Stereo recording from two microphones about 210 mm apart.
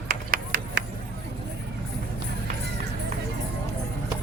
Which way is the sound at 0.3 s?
45° right (ahead or behind).